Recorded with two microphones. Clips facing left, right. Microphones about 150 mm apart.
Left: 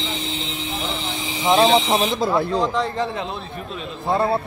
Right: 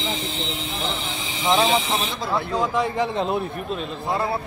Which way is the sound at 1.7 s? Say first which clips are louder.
Left 5 dB; 40° left (ahead or behind).